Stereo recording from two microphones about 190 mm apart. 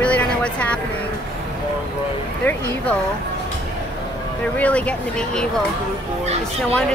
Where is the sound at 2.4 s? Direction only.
10° left (ahead or behind).